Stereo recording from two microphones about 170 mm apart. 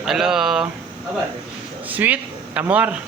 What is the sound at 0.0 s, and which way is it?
Speech, centre (ahead or behind).